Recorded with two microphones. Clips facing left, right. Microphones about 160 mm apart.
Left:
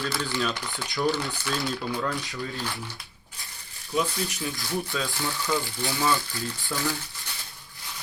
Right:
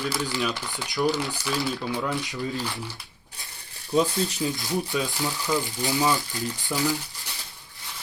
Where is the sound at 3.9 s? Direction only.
35° right (ahead or behind).